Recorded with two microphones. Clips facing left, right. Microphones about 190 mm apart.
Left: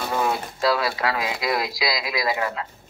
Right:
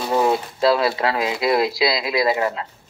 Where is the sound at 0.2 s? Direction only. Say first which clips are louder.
Right 5 dB; 25° right (ahead or behind).